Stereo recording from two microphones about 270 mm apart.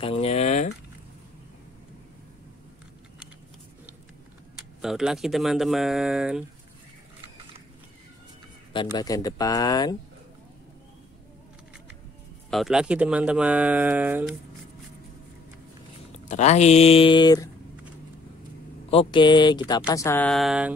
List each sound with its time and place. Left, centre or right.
0.0 s a sound: left
4.8 s speech: centre
8.7 s speech: centre
12.4 s speech: centre
16.1 s speech: left
18.9 s speech: centre